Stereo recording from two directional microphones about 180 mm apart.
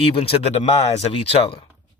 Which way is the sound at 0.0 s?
30° left (ahead or behind).